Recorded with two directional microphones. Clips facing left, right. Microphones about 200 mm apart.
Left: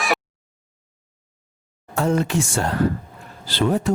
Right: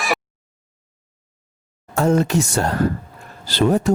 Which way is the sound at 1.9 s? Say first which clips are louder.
Right 3 dB; 45° right (ahead or behind).